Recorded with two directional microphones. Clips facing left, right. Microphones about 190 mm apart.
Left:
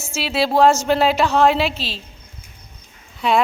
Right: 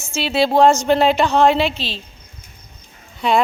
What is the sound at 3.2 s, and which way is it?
Speech, centre (ahead or behind).